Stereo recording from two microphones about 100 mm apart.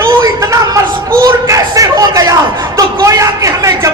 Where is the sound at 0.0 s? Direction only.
35° right (ahead or behind).